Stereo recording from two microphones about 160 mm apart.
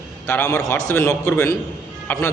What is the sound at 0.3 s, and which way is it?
A man's voice, 15° left (ahead or behind).